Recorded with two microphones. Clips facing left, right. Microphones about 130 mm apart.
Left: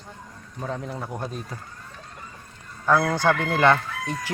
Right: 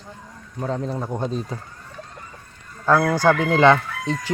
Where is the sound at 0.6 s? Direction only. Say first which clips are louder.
Right 5 dB; 20° right (ahead or behind).